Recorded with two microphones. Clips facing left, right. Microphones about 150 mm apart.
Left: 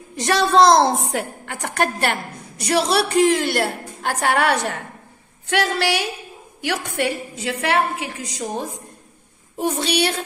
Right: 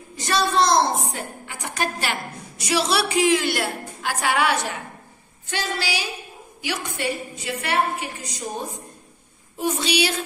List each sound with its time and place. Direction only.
0.1 s a woman's voice: 65° left (ahead or behind)
5.5 s a woman's voice: 70° left (ahead or behind)
9.8 s a woman's voice: 60° left (ahead or behind)